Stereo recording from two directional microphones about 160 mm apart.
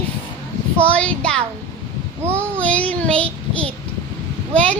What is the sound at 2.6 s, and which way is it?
Child singing, 10° left (ahead or behind).